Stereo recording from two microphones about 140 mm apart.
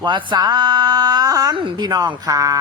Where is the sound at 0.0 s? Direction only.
35° right (ahead or behind).